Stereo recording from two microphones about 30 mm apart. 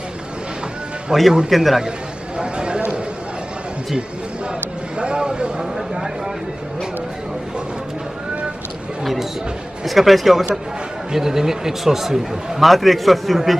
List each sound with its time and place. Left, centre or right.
1.1 s a man's voice: centre
1.5 s a man's voice: centre
2.3 s a sound: right
4.9 s vehicle: right
9.8 s a man's voice: centre
11.1 s a man's voice: centre
12.6 s a man's voice: centre